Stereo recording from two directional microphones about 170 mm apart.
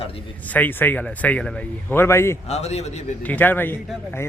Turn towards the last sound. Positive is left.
turn(degrees=10)  # may be behind; listen again after turning